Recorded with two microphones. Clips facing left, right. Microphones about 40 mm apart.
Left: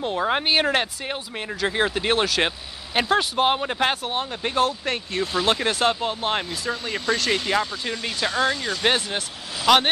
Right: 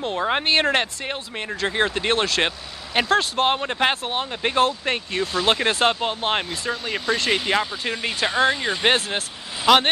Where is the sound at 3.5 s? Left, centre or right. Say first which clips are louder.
Right 1 dB; centre.